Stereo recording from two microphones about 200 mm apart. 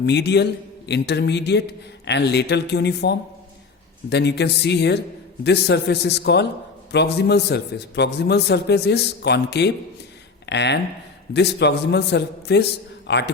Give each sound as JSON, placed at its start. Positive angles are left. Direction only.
{"t": 0.0, "sound": "a man's voice", "side_deg": 55}